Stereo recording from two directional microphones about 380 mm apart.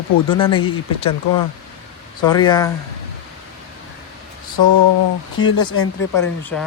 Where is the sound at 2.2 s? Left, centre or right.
Centre.